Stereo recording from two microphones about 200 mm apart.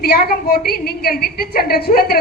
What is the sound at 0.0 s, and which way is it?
A woman's voice, 50° left (ahead or behind).